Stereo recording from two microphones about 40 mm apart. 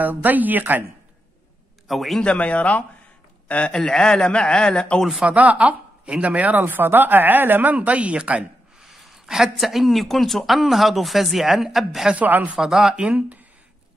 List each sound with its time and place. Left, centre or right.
0.0 s speech: right
1.9 s speech: centre
2.2 s speech: left
3.7 s a man's voice: centre
5.2 s speech: right
7.7 s speech: right
8.8 s speech: centre
12.2 s speech: right
12.5 s speech: centre